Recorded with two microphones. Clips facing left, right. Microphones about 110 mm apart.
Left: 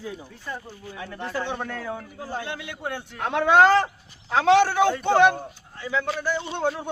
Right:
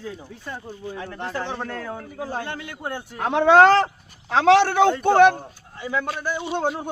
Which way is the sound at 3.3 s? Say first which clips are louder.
Right 3 dB; 25° right (ahead or behind).